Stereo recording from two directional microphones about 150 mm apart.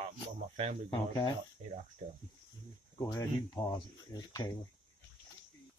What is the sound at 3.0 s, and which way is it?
Speech, 20° left (ahead or behind).